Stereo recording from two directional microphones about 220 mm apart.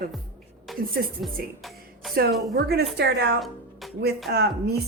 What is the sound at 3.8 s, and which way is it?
Music, centre (ahead or behind).